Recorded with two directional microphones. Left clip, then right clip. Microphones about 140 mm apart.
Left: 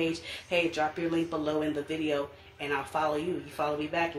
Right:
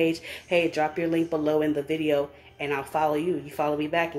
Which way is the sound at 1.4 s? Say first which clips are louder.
Right 6 dB; 25° right (ahead or behind).